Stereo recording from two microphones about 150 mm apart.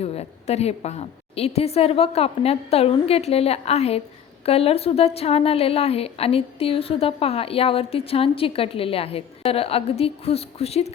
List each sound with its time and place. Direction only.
0.0 s a woman's voice: 45° left (ahead or behind)